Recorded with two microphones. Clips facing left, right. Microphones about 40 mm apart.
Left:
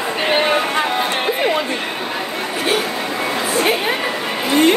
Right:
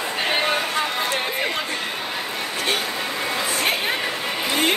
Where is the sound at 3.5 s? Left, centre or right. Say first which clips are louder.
Left 7 dB; centre.